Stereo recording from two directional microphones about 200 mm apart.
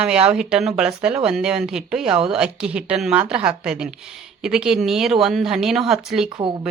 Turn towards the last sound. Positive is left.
turn(degrees=-25)  # may be behind; listen again after turning